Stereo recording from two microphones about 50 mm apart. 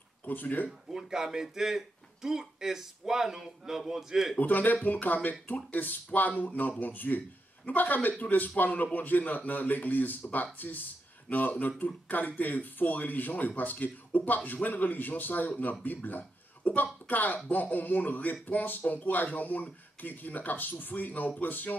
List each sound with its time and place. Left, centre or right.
0.2 s speech: left
0.9 s speech: centre
4.4 s a man's voice: left